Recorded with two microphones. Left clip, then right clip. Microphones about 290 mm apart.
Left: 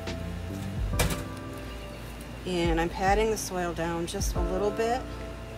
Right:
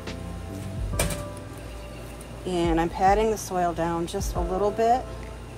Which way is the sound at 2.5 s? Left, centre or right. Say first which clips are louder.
Right 3 dB; right.